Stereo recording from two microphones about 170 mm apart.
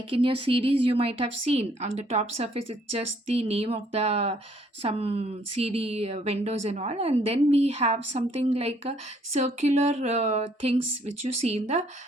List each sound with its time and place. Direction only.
0.1 s speech: 30° right (ahead or behind)